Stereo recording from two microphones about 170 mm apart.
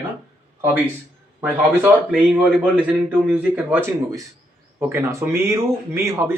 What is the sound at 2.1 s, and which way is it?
Speech, 5° right (ahead or behind).